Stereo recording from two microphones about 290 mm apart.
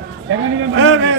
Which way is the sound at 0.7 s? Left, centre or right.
Right.